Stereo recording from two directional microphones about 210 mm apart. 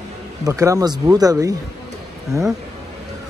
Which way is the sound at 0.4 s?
15° right (ahead or behind).